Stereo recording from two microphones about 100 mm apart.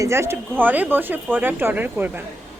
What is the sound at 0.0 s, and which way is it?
Speech, 25° right (ahead or behind).